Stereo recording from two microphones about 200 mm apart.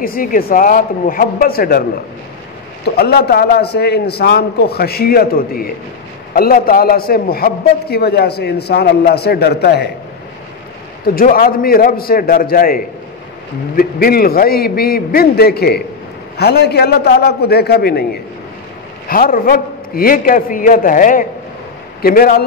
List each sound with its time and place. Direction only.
0.0 s a man's voice: 45° left (ahead or behind)
11.1 s a man's voice: 45° left (ahead or behind)